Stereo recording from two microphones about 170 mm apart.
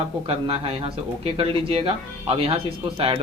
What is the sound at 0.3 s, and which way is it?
Speech, 35° right (ahead or behind).